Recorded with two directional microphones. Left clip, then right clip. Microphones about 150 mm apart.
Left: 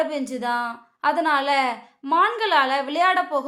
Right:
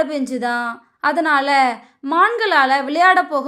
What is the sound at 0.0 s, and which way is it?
A woman's voice, 25° right (ahead or behind).